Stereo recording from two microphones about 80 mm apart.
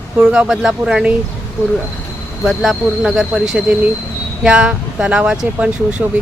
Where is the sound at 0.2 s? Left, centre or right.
Centre.